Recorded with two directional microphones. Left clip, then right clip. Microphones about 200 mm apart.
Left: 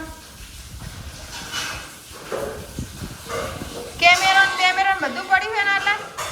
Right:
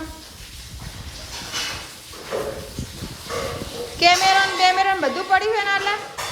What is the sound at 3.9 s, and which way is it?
Female singing, 25° right (ahead or behind).